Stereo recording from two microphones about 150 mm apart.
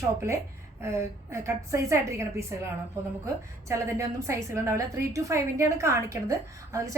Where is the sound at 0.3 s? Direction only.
20° right (ahead or behind).